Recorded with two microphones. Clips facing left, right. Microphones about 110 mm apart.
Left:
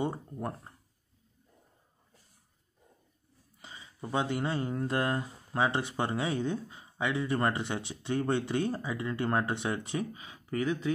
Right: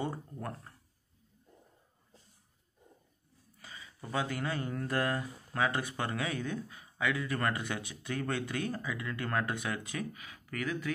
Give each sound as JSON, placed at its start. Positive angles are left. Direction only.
{"t": 0.0, "sound": "speech", "side_deg": 20}
{"t": 3.5, "sound": "speech", "side_deg": 20}